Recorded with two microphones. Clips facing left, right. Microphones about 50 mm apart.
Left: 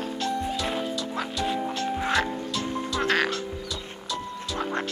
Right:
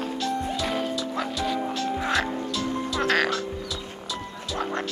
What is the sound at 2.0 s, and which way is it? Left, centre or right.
Music, centre.